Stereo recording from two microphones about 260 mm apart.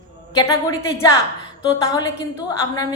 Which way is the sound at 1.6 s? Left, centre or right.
Centre.